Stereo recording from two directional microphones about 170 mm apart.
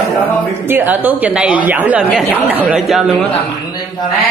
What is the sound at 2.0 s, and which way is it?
A man's voice, centre (ahead or behind).